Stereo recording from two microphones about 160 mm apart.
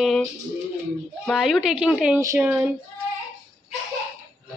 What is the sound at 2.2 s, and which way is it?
Speech, 20° right (ahead or behind).